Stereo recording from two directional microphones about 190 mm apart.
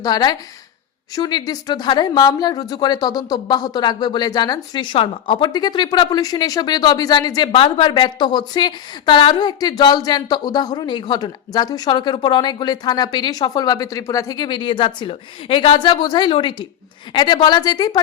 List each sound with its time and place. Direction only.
0.0 s a woman's voice: 20° left (ahead or behind)